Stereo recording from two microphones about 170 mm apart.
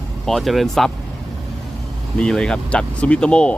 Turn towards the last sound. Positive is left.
turn(degrees=5)  # may be behind; listen again after turning